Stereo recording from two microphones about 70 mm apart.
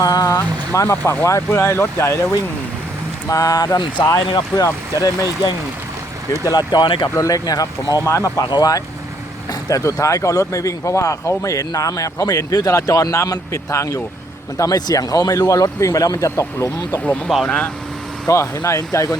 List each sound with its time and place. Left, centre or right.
0.0 s vehicle: left
0.7 s speech: left
3.2 s speech: left
4.5 s speech: left
6.4 s speech: left
7.2 s speech: left
8.0 s speech: left
8.4 s speech: left
9.5 s speech: left
14.6 s speech: left
17.4 s speech: centre
18.3 s speech: left